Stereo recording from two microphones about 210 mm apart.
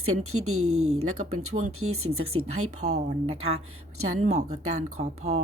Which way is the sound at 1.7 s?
90° right.